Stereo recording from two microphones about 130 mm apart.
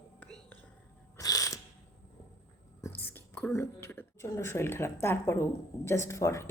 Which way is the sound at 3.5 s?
20° left (ahead or behind).